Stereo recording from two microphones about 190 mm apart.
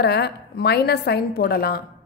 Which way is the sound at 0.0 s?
60° left (ahead or behind).